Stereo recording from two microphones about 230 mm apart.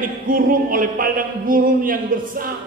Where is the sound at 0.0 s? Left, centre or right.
Right.